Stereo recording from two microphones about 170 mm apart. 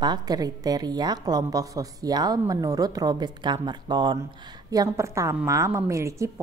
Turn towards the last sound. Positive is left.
turn(degrees=-15)  # may be behind; listen again after turning